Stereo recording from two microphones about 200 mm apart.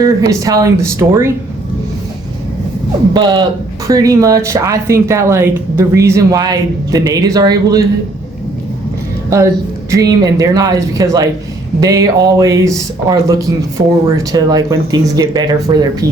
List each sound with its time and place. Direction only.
0.0 s speech: 15° right (ahead or behind)
3.1 s speech: 20° right (ahead or behind)
9.9 s speech: 15° right (ahead or behind)